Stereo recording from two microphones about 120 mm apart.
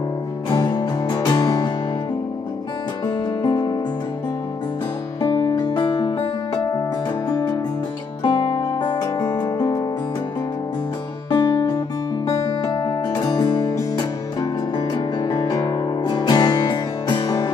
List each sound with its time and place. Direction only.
0.7 s music: 35° left (ahead or behind)
3.4 s music: 30° left (ahead or behind)
5.2 s music: 30° left (ahead or behind)
8.2 s music: 35° left (ahead or behind)
11.2 s music: 35° left (ahead or behind)